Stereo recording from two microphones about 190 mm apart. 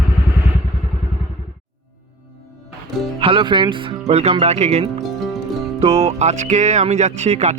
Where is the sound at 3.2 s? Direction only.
25° right (ahead or behind).